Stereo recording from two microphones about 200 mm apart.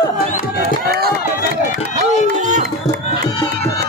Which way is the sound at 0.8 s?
50° right (ahead or behind).